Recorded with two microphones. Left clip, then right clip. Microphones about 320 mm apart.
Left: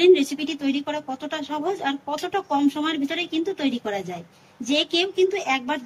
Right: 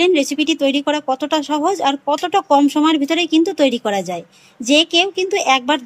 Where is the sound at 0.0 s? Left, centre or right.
Centre.